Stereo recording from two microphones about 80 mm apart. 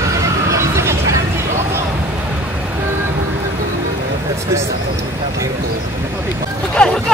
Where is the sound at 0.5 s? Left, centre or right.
Right.